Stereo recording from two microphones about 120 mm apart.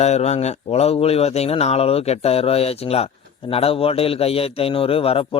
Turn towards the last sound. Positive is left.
turn(degrees=50)  # may be behind; listen again after turning